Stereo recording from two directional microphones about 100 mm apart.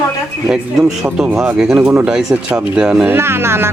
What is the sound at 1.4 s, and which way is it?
Speech, 5° right (ahead or behind).